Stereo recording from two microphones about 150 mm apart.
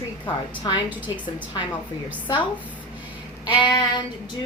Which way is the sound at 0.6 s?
30° left (ahead or behind).